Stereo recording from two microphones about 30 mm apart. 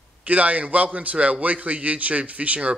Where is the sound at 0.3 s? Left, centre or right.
Right.